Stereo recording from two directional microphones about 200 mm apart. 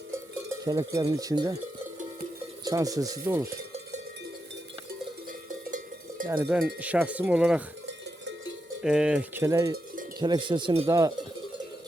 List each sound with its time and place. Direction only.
0.1 s cowbell: 15° right (ahead or behind)
2.6 s cowbell: 15° right (ahead or behind)
5.5 s cowbell: 40° right (ahead or behind)
6.2 s cowbell: 10° right (ahead or behind)
8.8 s speech: 5° right (ahead or behind)
9.4 s cowbell: 15° right (ahead or behind)
9.7 s cowbell: 45° right (ahead or behind)
10.2 s speech: 20° right (ahead or behind)